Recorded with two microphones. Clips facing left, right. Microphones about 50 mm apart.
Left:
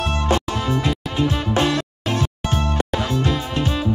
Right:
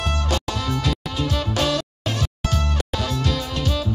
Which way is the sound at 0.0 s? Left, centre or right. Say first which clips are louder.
Left 4 dB; left.